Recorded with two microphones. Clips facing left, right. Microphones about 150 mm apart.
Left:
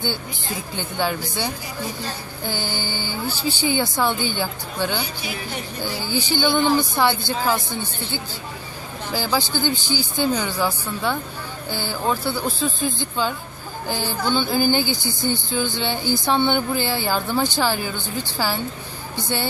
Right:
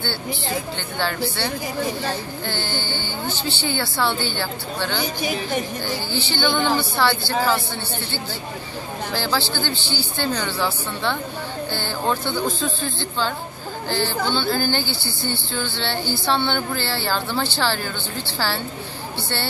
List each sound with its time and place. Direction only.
0.7 s speech: 15° left (ahead or behind)
5.0 s a woman's voice: 45° right (ahead or behind)
6.1 s speech: 10° left (ahead or behind)